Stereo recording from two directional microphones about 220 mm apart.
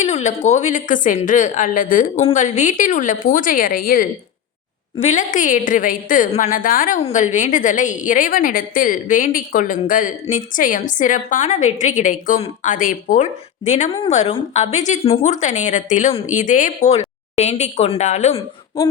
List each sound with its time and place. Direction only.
0.0 s a woman's voice: 30° left (ahead or behind)